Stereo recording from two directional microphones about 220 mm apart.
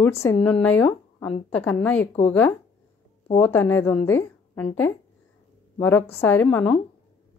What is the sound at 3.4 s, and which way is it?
A woman's voice, 10° left (ahead or behind).